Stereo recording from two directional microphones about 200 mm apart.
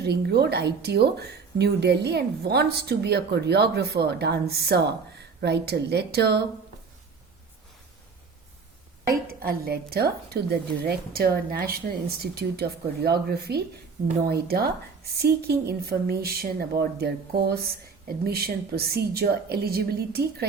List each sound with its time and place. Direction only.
0.0 s speech: 55° right (ahead or behind)
9.4 s a woman's voice: 50° right (ahead or behind)